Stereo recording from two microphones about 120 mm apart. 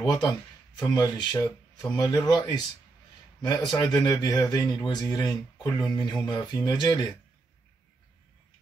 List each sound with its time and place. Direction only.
0.0 s speech: 35° left (ahead or behind)